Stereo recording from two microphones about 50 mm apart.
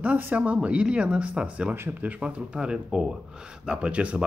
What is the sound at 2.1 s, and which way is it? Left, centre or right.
Speech, centre.